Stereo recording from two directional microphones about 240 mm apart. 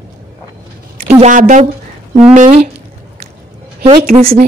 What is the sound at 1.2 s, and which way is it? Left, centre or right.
A woman's voice, right.